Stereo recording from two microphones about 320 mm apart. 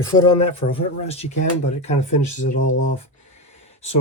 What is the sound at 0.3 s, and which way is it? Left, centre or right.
Speech, centre.